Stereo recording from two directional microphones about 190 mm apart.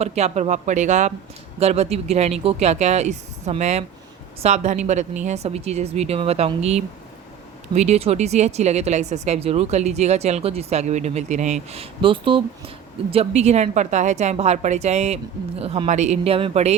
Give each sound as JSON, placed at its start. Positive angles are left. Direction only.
{"t": 0.0, "sound": "speech", "side_deg": -35}